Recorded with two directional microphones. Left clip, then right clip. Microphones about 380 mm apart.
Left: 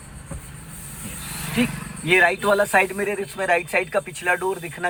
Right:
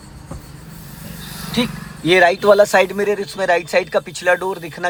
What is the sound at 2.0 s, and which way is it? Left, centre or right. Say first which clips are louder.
Speech: right 6 dB; centre.